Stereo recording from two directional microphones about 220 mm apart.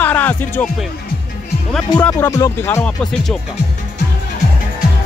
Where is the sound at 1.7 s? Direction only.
5° left (ahead or behind).